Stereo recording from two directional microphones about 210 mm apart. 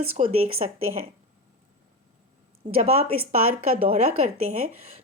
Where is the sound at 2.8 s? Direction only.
30° right (ahead or behind).